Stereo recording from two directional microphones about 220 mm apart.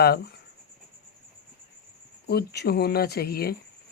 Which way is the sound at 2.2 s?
45° left (ahead or behind).